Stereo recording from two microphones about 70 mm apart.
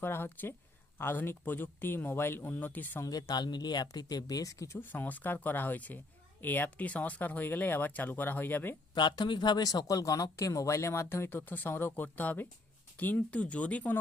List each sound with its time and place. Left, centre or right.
0.0 s speech: left
3.0 s speech: left
4.8 s speech: left
9.0 s speech: left
9.8 s speech: left